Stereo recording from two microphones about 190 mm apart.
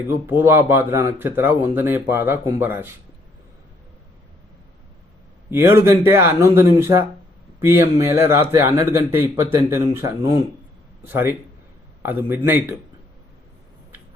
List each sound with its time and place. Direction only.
0.1 s speech: 10° right (ahead or behind)
5.5 s speech: 10° right (ahead or behind)